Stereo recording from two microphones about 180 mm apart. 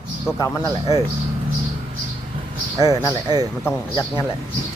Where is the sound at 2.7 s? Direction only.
20° right (ahead or behind).